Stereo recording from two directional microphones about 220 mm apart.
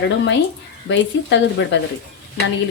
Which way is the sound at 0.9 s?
55° left (ahead or behind).